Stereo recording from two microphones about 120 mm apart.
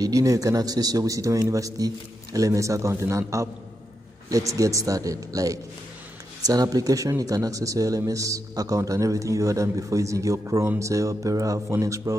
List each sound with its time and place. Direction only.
0.0 s speech: 30° right (ahead or behind)